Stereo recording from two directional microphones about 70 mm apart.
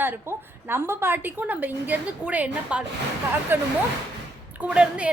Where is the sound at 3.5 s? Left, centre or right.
Right.